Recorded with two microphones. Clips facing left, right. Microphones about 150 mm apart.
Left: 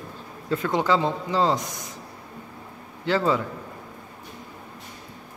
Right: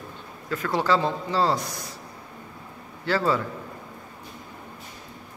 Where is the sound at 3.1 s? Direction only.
20° left (ahead or behind).